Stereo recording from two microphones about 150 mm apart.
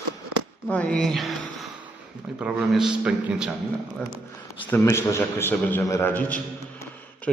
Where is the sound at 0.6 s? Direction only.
10° left (ahead or behind).